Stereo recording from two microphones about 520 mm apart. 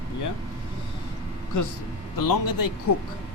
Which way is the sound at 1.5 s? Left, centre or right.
Left.